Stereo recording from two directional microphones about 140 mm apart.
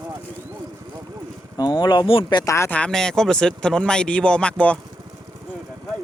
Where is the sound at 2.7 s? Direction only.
5° left (ahead or behind).